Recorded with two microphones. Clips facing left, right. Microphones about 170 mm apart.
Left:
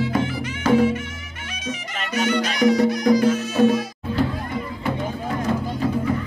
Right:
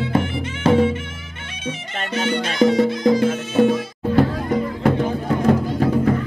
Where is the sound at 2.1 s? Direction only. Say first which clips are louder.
Right 2 dB; 30° right (ahead or behind).